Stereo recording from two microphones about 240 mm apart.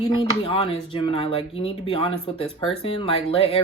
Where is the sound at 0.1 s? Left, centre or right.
Left.